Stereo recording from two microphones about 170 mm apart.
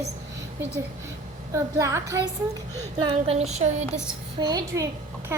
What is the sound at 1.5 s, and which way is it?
Speech, 15° right (ahead or behind).